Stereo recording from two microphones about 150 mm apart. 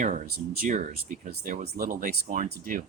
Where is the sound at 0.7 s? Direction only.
55° right (ahead or behind).